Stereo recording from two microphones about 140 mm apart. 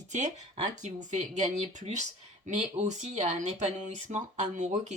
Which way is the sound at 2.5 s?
60° right (ahead or behind).